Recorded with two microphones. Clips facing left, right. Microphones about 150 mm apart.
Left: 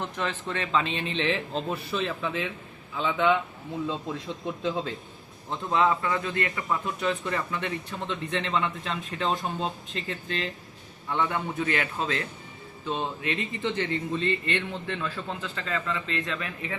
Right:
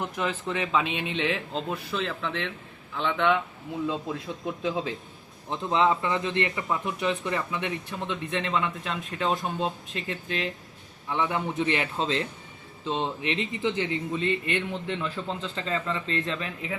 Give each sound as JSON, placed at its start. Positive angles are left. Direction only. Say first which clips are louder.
{"t": 0.0, "sound": "a man's voice", "louder": "right 2 dB", "side_deg": -10}
{"t": 4.6, "sound": "a man's voice", "louder": "even", "side_deg": -10}
{"t": 5.5, "sound": "a man's voice", "louder": "right 1 dB", "side_deg": -20}